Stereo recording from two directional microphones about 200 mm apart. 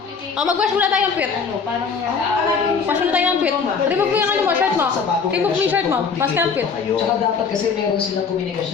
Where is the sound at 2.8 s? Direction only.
5° right (ahead or behind).